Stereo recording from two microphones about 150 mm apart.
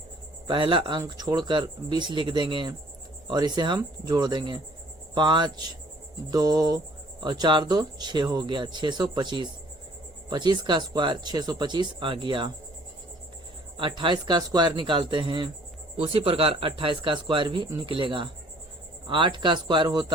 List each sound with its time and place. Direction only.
0.4 s speech: 35° right (ahead or behind)
13.7 s speech: 35° right (ahead or behind)